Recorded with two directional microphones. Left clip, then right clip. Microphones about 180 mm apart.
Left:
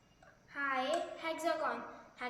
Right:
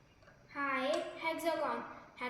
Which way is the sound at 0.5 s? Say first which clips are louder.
Even; 15° left (ahead or behind).